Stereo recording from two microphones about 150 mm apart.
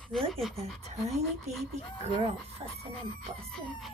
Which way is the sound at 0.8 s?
45° right (ahead or behind).